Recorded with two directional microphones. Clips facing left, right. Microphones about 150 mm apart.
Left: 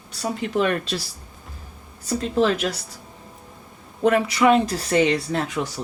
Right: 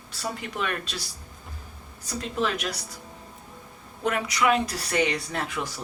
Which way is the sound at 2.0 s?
30° left (ahead or behind).